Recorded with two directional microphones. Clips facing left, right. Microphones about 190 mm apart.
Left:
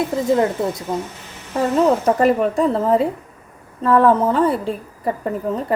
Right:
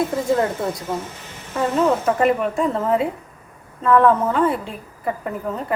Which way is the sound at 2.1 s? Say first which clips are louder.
Left 3 dB; 35° left (ahead or behind).